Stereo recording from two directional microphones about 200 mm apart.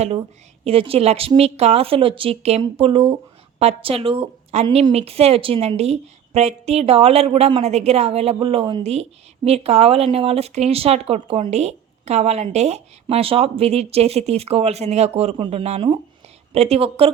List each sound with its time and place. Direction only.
0.6 s a woman's voice: 30° right (ahead or behind)